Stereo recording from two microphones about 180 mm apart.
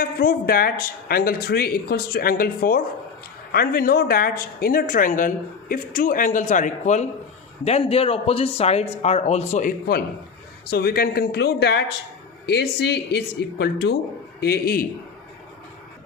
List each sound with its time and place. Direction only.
0.0 s speech: 55° left (ahead or behind)
14.4 s speech: 60° left (ahead or behind)